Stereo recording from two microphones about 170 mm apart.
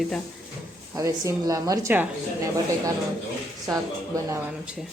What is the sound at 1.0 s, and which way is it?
A woman's voice, 20° right (ahead or behind).